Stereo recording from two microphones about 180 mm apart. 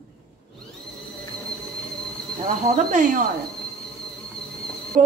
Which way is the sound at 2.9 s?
45° right (ahead or behind).